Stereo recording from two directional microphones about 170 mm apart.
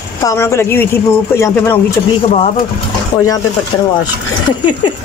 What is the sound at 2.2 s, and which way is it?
Speech, 40° left (ahead or behind).